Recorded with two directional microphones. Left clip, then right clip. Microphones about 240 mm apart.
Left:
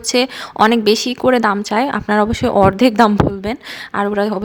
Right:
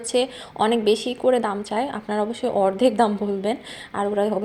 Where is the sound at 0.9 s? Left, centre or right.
Left.